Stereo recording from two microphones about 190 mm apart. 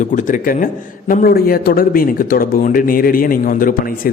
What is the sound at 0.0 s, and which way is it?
A man's voice, 40° left (ahead or behind).